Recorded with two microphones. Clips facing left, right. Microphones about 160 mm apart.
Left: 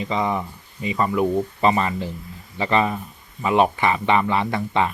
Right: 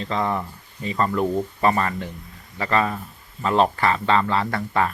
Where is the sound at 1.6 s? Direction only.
20° left (ahead or behind).